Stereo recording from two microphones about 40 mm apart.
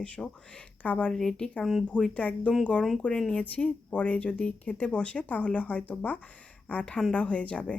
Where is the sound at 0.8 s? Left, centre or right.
Left.